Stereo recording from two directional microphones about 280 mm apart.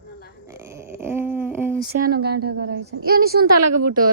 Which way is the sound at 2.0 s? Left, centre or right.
Right.